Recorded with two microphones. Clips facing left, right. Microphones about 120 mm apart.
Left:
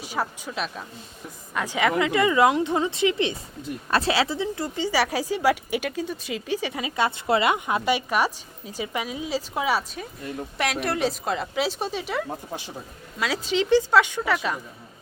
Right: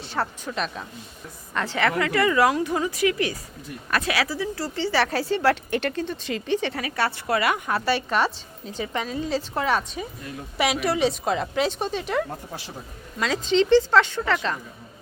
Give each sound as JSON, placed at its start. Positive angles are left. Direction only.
{"t": 0.0, "sound": "a woman's voice", "side_deg": 10}
{"t": 6.8, "sound": "a woman's voice", "side_deg": 20}